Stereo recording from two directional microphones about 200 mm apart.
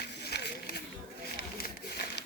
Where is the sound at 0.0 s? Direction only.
55° left (ahead or behind).